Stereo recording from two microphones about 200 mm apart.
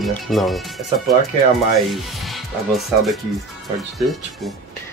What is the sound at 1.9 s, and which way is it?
Speech, centre (ahead or behind).